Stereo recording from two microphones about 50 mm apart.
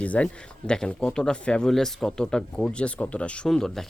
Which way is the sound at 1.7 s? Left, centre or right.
Centre.